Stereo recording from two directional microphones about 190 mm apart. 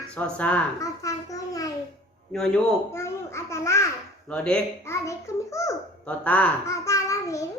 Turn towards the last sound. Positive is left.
turn(degrees=15)  # may be behind; listen again after turning